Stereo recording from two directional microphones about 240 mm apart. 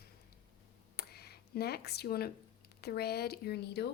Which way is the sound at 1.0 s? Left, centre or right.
Left.